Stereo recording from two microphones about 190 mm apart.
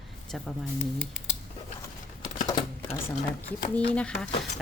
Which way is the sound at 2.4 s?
20° left (ahead or behind).